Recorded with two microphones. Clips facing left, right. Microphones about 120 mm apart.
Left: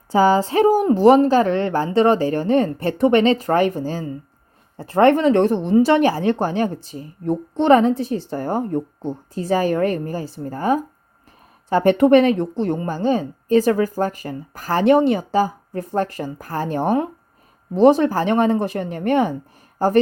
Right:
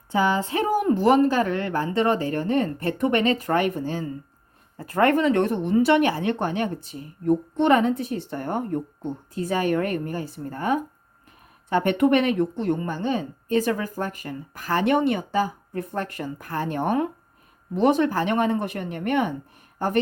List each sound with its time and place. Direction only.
0.1 s a woman's voice: 35° left (ahead or behind)